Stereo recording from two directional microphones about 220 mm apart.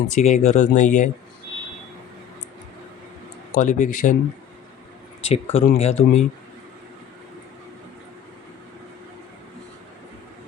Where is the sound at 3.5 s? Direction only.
35° left (ahead or behind).